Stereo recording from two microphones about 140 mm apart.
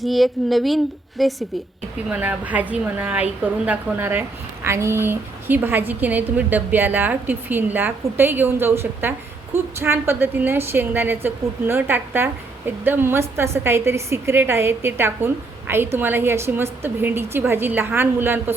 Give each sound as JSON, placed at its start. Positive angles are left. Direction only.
{"t": 0.0, "sound": "a woman's voice", "side_deg": 0}